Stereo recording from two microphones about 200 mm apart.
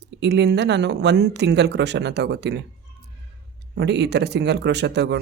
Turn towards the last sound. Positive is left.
turn(degrees=-60)  # may be behind; listen again after turning